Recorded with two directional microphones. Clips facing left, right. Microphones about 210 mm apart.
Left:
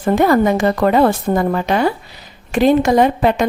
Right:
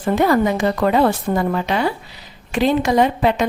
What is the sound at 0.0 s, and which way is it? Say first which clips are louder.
A woman's voice: left 3 dB; 50° left (ahead or behind).